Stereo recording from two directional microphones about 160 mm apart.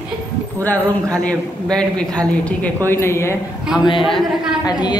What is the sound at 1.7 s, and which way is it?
A man's voice, 5° left (ahead or behind).